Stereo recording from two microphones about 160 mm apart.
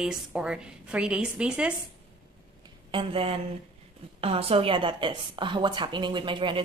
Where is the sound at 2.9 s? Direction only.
35° right (ahead or behind).